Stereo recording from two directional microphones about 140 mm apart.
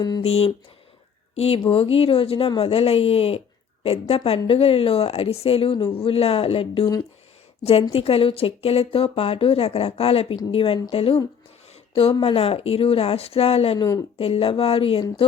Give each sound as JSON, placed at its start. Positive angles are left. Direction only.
{"t": 0.2, "sound": "a woman's voice", "side_deg": 45}
{"t": 1.5, "sound": "a woman's voice", "side_deg": 40}
{"t": 11.7, "sound": "a sound", "side_deg": 45}
{"t": 12.2, "sound": "a woman's voice", "side_deg": 45}